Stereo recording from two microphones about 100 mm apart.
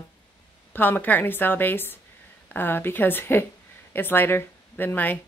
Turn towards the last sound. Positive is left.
turn(degrees=20)  # may be behind; listen again after turning